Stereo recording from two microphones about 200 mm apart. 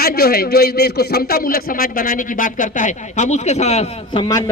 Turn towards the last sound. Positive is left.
turn(degrees=20)  # may be behind; listen again after turning